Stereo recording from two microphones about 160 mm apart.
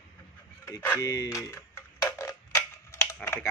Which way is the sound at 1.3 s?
15° left (ahead or behind).